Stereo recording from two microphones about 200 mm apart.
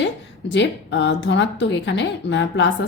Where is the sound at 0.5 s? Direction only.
65° left (ahead or behind).